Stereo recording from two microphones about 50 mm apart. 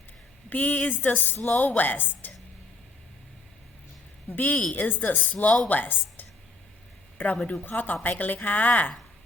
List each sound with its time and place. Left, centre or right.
0.5 s a woman's voice: left
4.4 s a woman's voice: left